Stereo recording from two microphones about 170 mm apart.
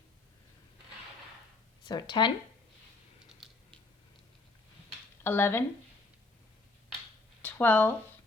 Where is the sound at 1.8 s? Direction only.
25° left (ahead or behind).